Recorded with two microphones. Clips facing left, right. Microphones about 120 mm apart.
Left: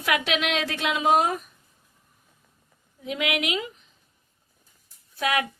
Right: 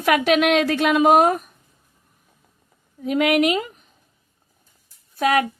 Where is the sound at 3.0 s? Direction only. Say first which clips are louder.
Right 10 dB; 45° right (ahead or behind).